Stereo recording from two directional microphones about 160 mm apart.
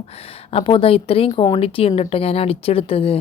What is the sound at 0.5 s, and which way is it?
Speech, 35° left (ahead or behind).